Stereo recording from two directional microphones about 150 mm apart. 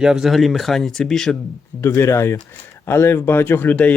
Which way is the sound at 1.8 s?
20° left (ahead or behind).